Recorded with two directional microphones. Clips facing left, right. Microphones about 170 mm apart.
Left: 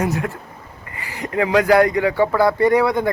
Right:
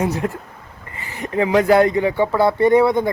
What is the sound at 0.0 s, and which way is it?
Speech, 30° right (ahead or behind).